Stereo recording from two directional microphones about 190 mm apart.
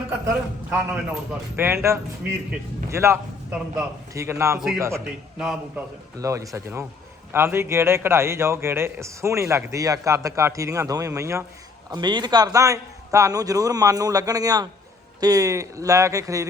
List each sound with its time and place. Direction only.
0.3 s a man's voice: 10° right (ahead or behind)
5.4 s a man's voice: 5° right (ahead or behind)
6.1 s a man's voice: 15° right (ahead or behind)